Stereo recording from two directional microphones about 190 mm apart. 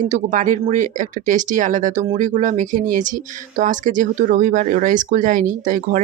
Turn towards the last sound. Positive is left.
turn(degrees=-45)  # may be behind; listen again after turning